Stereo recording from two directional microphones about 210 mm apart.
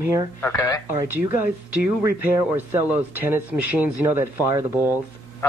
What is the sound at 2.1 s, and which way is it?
Speech, 45° left (ahead or behind).